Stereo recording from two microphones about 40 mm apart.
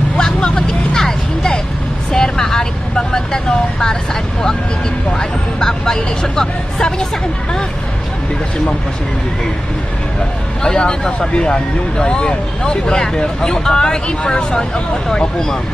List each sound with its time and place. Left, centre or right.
0.2 s vehicle: left
10.6 s speech: centre